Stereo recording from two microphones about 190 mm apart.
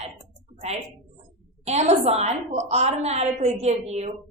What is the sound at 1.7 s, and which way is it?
A woman's voice, 35° right (ahead or behind).